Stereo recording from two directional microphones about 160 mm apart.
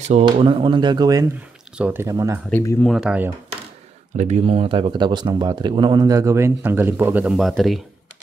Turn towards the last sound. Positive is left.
turn(degrees=0)  # may be behind; listen again after turning